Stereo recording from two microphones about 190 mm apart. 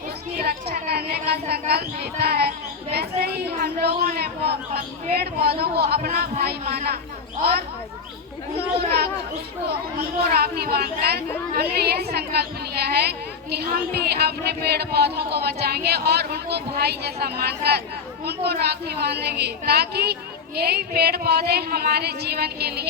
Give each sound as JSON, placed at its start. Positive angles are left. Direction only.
{"t": 0.3, "sound": "a woman's voice", "side_deg": -55}
{"t": 9.6, "sound": "speech", "side_deg": -55}